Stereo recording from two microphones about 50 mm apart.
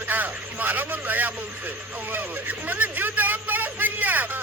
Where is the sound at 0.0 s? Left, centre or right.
Right.